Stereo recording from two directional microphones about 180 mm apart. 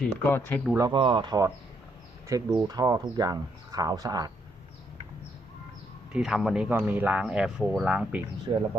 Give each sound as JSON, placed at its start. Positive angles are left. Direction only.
{"t": 0.0, "sound": "speech", "side_deg": 10}
{"t": 0.8, "sound": "speech", "side_deg": -25}
{"t": 6.1, "sound": "speech", "side_deg": -5}
{"t": 8.5, "sound": "speech", "side_deg": -25}